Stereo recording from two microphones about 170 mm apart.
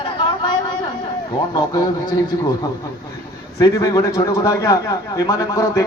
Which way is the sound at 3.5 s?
20° left (ahead or behind).